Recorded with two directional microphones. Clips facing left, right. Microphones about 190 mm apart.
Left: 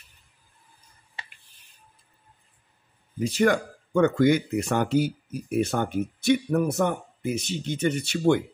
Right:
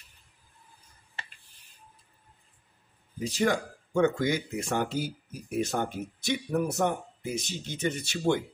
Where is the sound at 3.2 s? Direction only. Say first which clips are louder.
Left 5 dB; 60° left (ahead or behind).